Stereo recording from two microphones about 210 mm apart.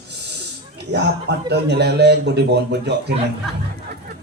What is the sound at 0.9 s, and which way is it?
A man's voice, 50° right (ahead or behind).